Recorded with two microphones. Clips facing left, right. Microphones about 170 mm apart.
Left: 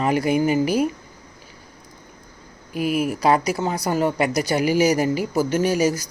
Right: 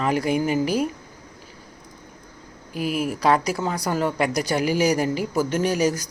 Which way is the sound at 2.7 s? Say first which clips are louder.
Left 3 dB; 40° right (ahead or behind).